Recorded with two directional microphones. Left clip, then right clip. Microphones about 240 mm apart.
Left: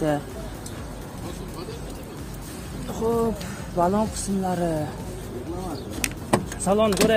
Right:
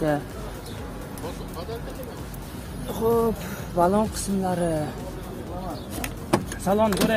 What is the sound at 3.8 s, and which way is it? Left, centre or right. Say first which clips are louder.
Speech: right 1 dB; centre.